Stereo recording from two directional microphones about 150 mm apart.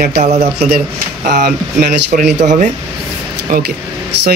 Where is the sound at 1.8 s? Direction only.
75° right (ahead or behind); by 2.7 s 55° right (ahead or behind).